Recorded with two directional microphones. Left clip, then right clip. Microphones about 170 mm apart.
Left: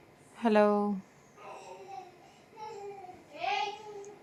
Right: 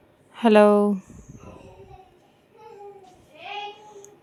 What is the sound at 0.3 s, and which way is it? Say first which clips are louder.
Speech: right 10 dB; 65° right (ahead or behind).